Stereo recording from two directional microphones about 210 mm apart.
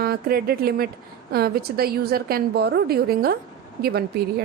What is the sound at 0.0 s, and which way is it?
A woman's voice, 45° right (ahead or behind).